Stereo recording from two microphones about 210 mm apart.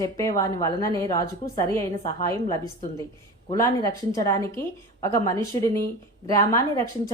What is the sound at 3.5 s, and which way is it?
A woman's voice, 15° left (ahead or behind).